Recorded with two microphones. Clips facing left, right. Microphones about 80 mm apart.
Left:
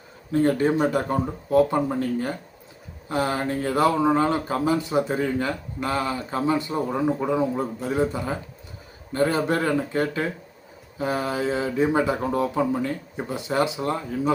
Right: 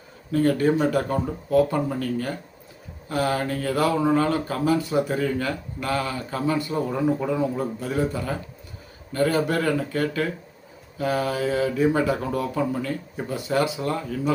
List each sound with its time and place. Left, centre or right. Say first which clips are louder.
0.3 s speech: even; left